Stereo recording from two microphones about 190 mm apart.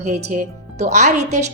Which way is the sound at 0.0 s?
40° right (ahead or behind).